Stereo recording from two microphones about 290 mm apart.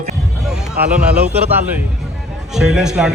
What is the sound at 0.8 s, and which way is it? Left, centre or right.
Speech, centre.